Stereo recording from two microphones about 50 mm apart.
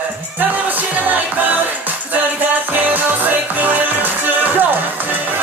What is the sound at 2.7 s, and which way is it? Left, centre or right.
Music, right.